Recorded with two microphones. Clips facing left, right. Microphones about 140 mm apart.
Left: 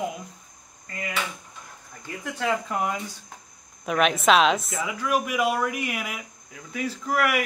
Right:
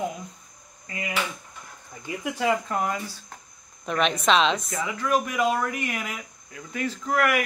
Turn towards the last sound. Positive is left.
turn(degrees=10)  # may be behind; listen again after turning